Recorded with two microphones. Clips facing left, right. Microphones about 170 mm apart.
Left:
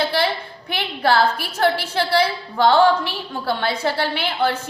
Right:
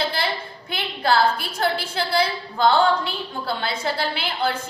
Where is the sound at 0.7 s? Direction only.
65° left (ahead or behind).